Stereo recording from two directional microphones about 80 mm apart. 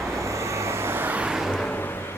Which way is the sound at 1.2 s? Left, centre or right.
Centre.